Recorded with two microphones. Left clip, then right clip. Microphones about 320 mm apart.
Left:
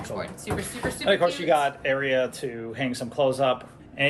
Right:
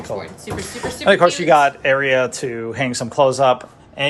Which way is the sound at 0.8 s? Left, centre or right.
Right.